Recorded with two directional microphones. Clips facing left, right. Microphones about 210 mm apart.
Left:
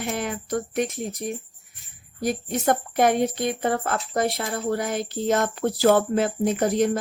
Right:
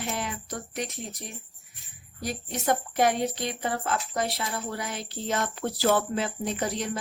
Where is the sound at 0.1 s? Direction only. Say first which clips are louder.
Left 7 dB; 55° left (ahead or behind).